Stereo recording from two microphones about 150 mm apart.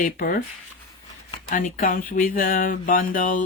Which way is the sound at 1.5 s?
60° left (ahead or behind).